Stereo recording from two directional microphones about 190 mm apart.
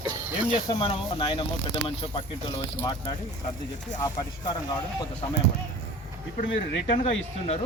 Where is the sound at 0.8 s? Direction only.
25° left (ahead or behind).